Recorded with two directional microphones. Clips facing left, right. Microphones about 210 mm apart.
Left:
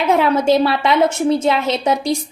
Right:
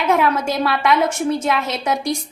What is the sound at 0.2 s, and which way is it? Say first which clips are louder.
A woman's voice: left 5 dB; 30° left (ahead or behind).